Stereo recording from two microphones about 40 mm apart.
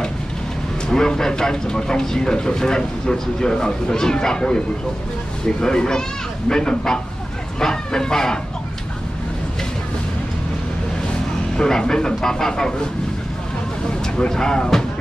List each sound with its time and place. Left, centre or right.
0.8 s a man's voice: centre
5.6 s a man's voice: centre
7.6 s vehicle: centre
11.5 s a man's voice: centre
14.1 s a man's voice: centre